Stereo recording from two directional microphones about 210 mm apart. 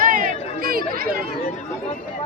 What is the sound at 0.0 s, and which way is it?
Chatter, 40° right (ahead or behind).